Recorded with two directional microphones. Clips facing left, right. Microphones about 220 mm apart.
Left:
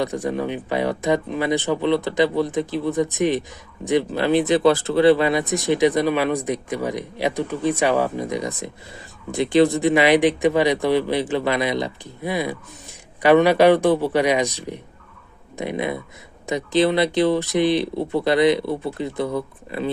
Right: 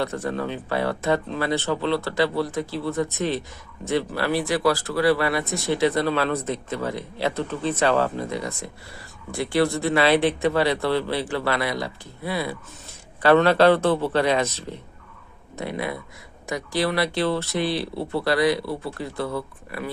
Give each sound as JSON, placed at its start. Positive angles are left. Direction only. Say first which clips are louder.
{"t": 0.0, "sound": "speech", "louder": "left 3 dB", "side_deg": 15}